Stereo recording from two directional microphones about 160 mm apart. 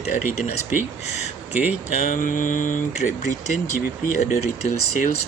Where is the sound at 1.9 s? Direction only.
55° left (ahead or behind).